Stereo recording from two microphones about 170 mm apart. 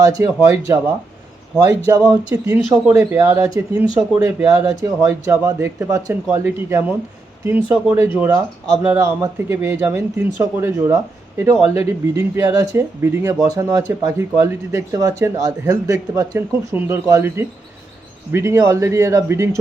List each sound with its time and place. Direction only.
0.0 s speech: 20° right (ahead or behind)